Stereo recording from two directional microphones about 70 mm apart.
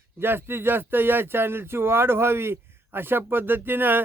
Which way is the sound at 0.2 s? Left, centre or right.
Right.